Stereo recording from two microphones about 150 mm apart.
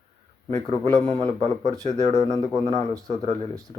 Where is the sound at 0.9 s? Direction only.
25° right (ahead or behind).